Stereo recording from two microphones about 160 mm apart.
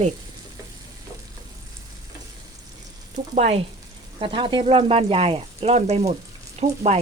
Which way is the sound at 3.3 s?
40° right (ahead or behind).